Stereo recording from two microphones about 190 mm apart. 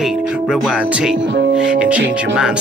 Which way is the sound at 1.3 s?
70° right (ahead or behind).